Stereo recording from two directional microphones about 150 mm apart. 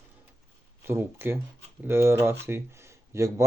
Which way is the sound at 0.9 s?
15° right (ahead or behind).